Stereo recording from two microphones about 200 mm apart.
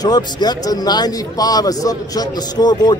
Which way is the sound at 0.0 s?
20° left (ahead or behind).